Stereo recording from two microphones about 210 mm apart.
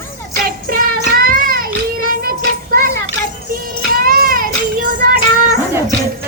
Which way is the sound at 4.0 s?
45° right (ahead or behind).